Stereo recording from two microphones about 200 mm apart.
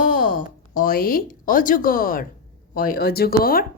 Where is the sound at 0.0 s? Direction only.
40° left (ahead or behind).